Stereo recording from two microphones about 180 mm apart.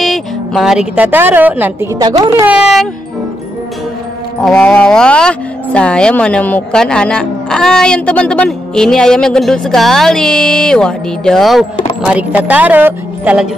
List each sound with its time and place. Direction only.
0.0 s a woman's voice: centre (ahead or behind); by 2.4 s 20° right (ahead or behind)
2.4 s speech: 5° right (ahead or behind)
4.4 s speech: 5° left (ahead or behind)